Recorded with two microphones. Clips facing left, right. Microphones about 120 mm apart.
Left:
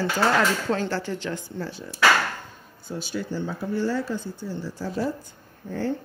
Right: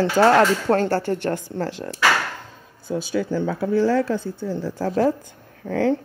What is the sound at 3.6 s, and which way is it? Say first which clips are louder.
Speech: right 7 dB; 85° right.